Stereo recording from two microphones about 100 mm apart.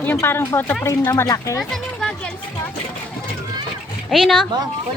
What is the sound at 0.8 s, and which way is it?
Speech, 35° left (ahead or behind).